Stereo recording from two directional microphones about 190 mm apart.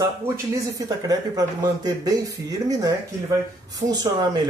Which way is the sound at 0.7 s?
20° right (ahead or behind).